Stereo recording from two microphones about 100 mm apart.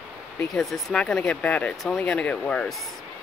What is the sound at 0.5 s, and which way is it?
Speech, centre (ahead or behind).